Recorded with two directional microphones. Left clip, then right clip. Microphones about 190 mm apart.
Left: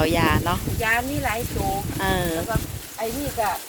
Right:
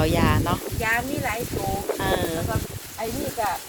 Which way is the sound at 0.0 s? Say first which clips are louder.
Left 2 dB; 5° left (ahead or behind).